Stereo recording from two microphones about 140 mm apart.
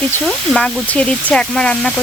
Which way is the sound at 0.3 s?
5° left (ahead or behind).